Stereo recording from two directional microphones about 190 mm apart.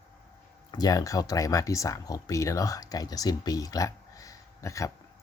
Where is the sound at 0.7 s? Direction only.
20° left (ahead or behind).